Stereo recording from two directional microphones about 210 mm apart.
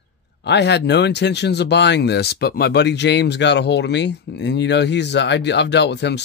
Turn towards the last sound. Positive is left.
turn(degrees=55)  # may be behind; listen again after turning